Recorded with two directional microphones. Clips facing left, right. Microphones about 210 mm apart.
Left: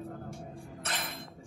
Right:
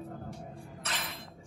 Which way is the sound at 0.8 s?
50° left (ahead or behind).